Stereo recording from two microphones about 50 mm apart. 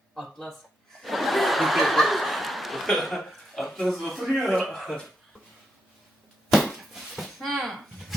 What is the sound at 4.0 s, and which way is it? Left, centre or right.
Speech, centre.